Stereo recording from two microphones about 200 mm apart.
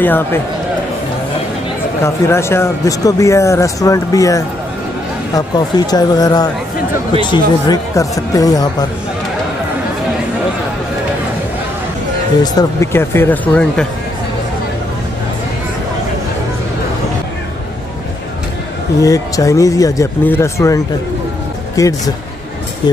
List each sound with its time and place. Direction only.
0.0 s speech: 10° left (ahead or behind)
2.0 s speech: 15° left (ahead or behind)
12.5 s speech: 15° left (ahead or behind)
18.9 s speech: 15° left (ahead or behind)